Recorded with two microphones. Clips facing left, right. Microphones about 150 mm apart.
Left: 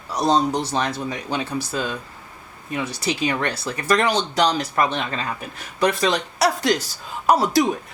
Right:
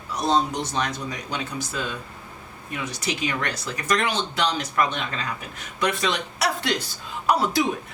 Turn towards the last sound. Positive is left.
turn(degrees=40)  # may be behind; listen again after turning